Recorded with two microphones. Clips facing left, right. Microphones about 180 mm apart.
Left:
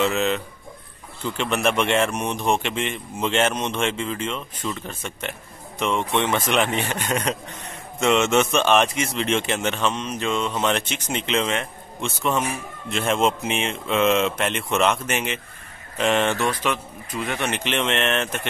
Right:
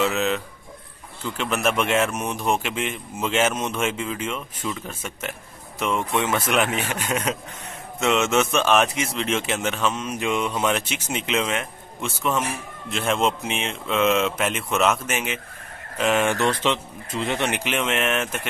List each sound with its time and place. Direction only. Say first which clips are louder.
0.0 s a man's voice: left 1 dB; 5° right (ahead or behind)
16.6 s speech: right 2 dB; 25° right (ahead or behind); by 18.5 s 5° right (ahead or behind)